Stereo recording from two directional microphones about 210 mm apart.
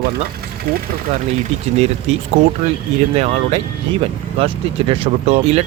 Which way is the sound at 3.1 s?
30° right (ahead or behind).